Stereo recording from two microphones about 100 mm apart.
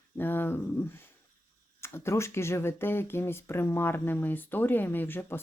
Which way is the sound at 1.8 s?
25° left (ahead or behind).